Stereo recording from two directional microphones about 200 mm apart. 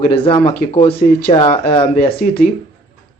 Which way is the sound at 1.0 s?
35° left (ahead or behind).